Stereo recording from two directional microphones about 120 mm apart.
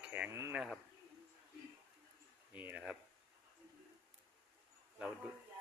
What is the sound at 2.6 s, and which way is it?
Speech, 10° right (ahead or behind).